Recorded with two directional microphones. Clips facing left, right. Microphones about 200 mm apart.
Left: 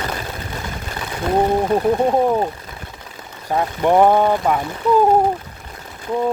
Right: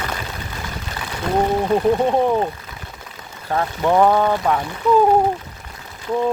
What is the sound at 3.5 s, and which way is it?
Speech, 15° left (ahead or behind).